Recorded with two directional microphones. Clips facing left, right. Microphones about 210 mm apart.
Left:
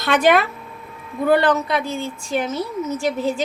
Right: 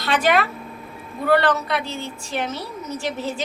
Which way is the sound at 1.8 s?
50° left (ahead or behind).